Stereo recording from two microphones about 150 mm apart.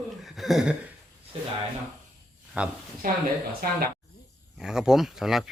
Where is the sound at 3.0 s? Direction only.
70° right (ahead or behind).